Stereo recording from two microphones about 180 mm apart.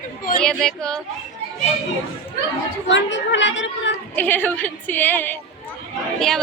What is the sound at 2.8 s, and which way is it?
Speech, 90° left.